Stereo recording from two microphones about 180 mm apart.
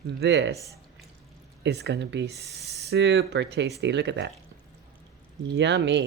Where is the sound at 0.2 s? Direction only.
70° right (ahead or behind).